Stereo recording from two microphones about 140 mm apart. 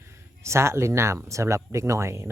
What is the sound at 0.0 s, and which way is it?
Speech, 20° right (ahead or behind).